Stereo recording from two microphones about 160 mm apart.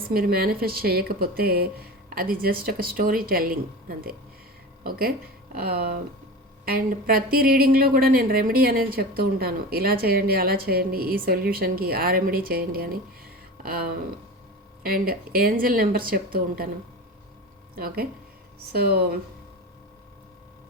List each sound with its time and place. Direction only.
0.0 s speech: 70° right (ahead or behind)
17.7 s speech: 65° right (ahead or behind)